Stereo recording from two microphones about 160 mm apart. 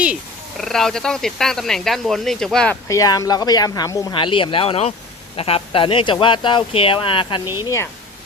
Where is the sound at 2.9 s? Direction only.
20° left (ahead or behind).